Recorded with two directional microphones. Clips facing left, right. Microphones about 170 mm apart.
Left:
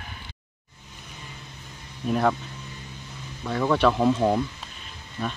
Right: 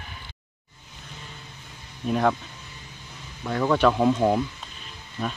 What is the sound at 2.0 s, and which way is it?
Speech, centre (ahead or behind).